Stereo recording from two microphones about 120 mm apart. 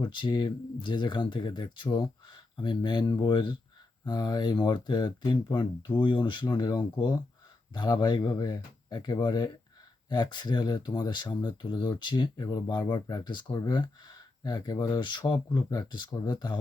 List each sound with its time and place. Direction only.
0.0 s speech: 40° left (ahead or behind)